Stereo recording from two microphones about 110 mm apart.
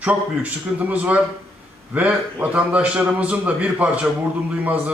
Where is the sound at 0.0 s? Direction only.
15° right (ahead or behind).